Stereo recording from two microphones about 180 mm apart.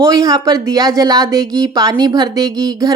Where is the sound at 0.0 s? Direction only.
20° right (ahead or behind).